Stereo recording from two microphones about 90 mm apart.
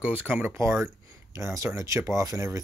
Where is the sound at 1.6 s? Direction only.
35° right (ahead or behind).